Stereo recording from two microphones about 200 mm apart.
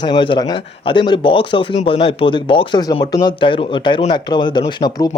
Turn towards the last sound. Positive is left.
turn(degrees=20)  # may be behind; listen again after turning